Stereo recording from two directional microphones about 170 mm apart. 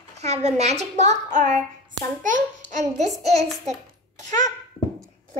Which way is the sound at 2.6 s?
45° right (ahead or behind).